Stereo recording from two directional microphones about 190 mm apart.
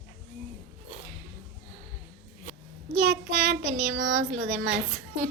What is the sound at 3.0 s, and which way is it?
Child singing, 70° right (ahead or behind).